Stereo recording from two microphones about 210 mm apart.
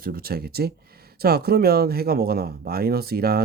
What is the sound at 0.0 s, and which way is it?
Speech, 45° right (ahead or behind).